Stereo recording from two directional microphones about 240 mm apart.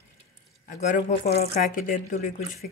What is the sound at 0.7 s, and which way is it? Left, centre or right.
Speech, left.